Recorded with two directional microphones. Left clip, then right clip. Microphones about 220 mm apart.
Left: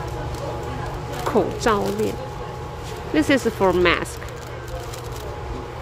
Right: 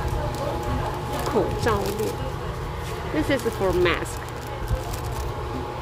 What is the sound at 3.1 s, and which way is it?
Speech, 30° left (ahead or behind).